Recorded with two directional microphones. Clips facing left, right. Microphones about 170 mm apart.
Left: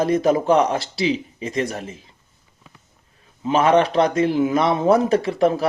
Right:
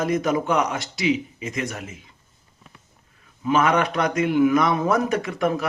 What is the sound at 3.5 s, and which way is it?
A man's voice, 30° left (ahead or behind).